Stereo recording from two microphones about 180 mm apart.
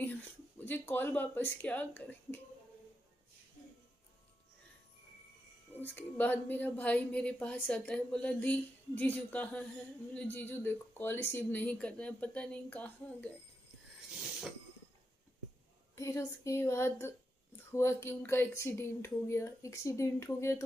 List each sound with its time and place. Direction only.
0.0 s a sound: 10° left (ahead or behind)
5.9 s a woman's voice: 10° left (ahead or behind)
16.0 s a woman's voice: 15° left (ahead or behind)